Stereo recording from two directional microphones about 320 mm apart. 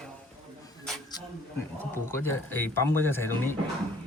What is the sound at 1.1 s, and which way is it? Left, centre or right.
Speech, centre.